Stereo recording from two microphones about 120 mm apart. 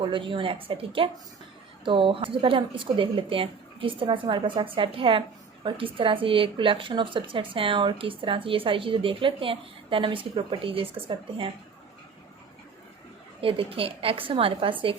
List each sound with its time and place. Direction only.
0.0 s speech: 45° right (ahead or behind)
13.4 s speech: 50° right (ahead or behind)